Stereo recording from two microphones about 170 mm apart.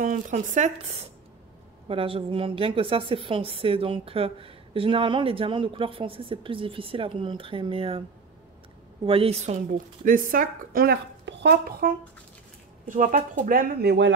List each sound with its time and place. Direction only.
0.0 s a woman's voice: 50° right (ahead or behind); by 8.0 s 30° right (ahead or behind)
9.0 s a woman's voice: 35° right (ahead or behind)
10.0 s a woman's voice: 55° right (ahead or behind); by 14.1 s 80° right